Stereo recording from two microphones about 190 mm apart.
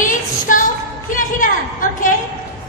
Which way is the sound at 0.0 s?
45° left (ahead or behind).